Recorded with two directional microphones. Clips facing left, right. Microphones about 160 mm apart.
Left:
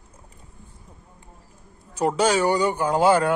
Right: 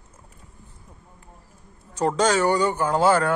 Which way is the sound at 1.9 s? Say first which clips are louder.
Even; 10° left (ahead or behind).